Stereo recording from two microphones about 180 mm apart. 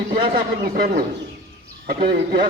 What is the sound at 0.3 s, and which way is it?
Speech, 55° right (ahead or behind).